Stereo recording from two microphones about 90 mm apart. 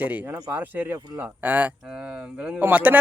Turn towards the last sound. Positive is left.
turn(degrees=-20)  # may be behind; listen again after turning